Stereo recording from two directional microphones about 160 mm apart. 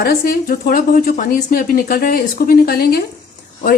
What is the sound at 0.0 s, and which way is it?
Speech, 70° left (ahead or behind).